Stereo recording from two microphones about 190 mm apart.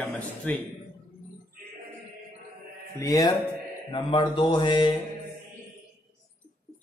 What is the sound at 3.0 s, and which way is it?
A man's voice, 15° left (ahead or behind).